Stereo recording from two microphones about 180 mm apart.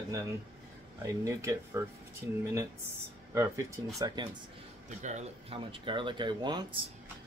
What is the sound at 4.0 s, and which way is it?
Speech, 25° right (ahead or behind).